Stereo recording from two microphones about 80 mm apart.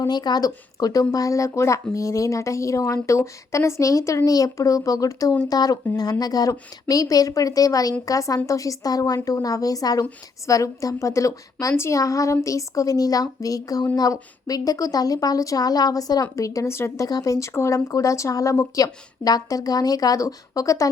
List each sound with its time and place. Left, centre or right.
0.1 s speech: left
17.1 s speech: left